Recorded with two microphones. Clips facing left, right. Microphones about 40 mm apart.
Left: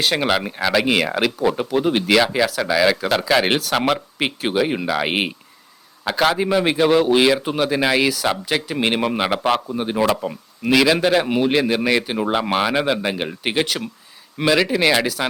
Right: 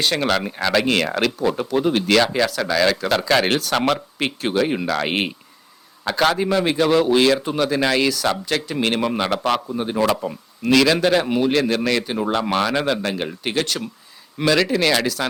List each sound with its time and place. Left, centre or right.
0.0 s a man's voice: centre